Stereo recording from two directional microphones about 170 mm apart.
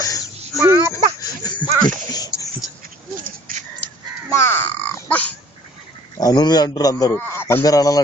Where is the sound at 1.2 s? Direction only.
25° left (ahead or behind).